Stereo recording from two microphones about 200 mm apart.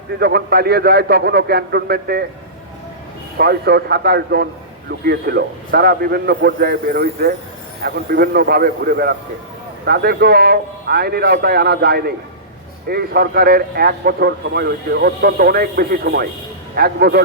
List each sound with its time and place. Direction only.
0.2 s speech: 55° right (ahead or behind)
3.3 s speech: 55° right (ahead or behind)